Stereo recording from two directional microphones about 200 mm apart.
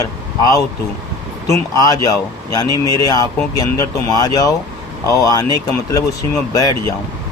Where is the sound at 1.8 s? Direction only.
15° left (ahead or behind).